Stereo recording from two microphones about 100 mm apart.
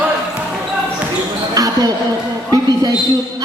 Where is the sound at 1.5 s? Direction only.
40° right (ahead or behind).